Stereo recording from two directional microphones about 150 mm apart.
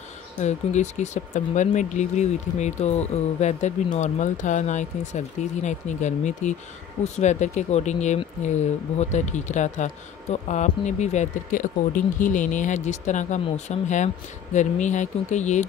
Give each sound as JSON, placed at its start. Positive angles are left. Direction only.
{"t": 0.4, "sound": "speech", "side_deg": 50}